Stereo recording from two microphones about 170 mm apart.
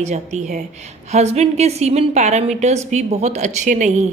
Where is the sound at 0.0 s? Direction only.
45° right (ahead or behind).